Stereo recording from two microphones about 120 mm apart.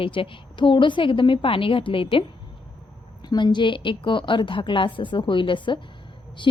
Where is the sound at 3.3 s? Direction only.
35° left (ahead or behind).